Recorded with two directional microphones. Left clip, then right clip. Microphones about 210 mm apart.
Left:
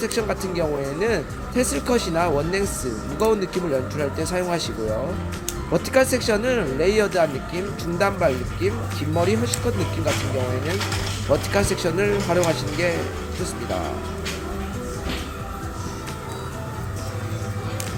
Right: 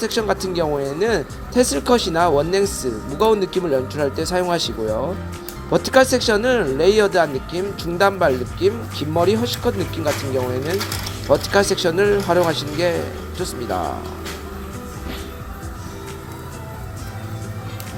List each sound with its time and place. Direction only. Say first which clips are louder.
0.0 s speech: right 4 dB; 5° right (ahead or behind)
5.7 s speech: right 5 dB; 5° right (ahead or behind)
11.3 s speech: right 5 dB; 5° right (ahead or behind)